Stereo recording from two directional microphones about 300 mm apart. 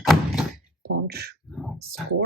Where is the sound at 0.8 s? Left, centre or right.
Right.